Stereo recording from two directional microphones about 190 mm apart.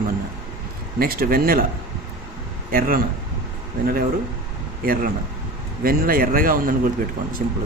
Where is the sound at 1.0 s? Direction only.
50° right (ahead or behind).